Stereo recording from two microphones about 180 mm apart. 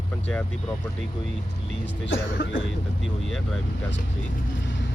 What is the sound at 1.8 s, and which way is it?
Speech, 85° left.